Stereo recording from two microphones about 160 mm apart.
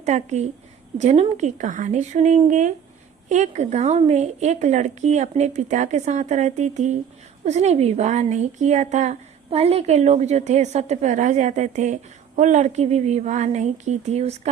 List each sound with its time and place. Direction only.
0.0 s speech: 45° right (ahead or behind)